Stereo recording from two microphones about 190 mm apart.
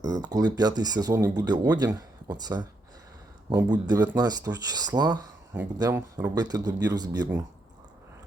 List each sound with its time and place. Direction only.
0.0 s speech: 20° right (ahead or behind)